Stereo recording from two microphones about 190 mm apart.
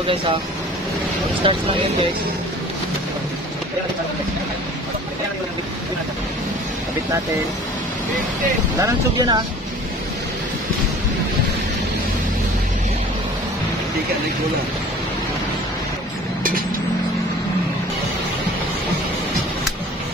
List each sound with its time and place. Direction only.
1.4 s speech: 25° right (ahead or behind)
8.7 s speech: 20° right (ahead or behind)